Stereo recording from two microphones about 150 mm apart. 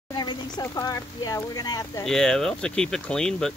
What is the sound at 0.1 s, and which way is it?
Speech, 25° left (ahead or behind).